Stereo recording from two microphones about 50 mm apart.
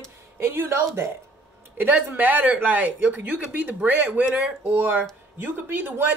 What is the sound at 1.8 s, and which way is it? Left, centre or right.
Speech, right.